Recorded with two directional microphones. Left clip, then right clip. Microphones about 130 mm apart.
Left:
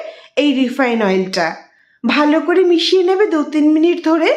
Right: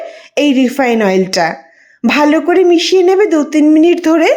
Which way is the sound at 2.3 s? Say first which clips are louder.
Right 3 dB; 35° right (ahead or behind).